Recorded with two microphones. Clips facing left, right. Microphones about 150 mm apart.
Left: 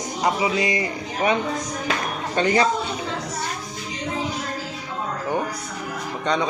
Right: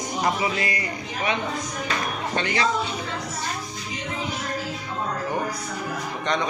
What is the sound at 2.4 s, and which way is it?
Speech, 40° left (ahead or behind).